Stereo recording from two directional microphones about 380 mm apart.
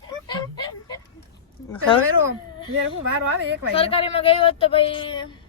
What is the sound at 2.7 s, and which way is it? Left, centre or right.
Speech, right.